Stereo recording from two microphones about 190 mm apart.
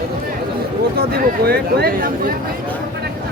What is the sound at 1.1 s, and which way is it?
Speech, 55° right (ahead or behind).